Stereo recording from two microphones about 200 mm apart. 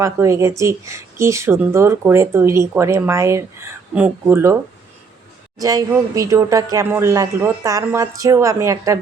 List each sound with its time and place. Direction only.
0.0 s speech: 15° right (ahead or behind)
5.5 s speech: 15° right (ahead or behind)